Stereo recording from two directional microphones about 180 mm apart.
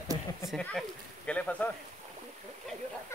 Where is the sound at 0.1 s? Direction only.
25° left (ahead or behind).